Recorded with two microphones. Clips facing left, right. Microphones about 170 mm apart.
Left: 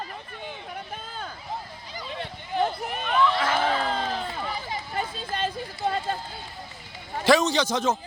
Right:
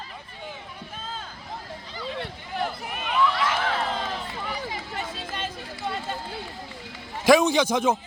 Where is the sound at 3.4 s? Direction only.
30° left (ahead or behind).